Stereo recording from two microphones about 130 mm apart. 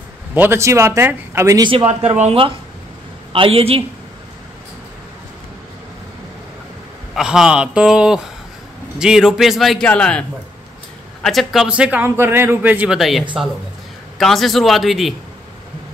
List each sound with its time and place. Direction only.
0.3 s speech: 15° right (ahead or behind)
1.9 s speech: 60° right (ahead or behind)
7.2 s a man's voice: 5° right (ahead or behind)
11.2 s a man's voice: centre (ahead or behind)